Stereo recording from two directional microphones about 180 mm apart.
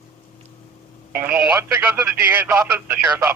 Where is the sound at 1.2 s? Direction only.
10° right (ahead or behind).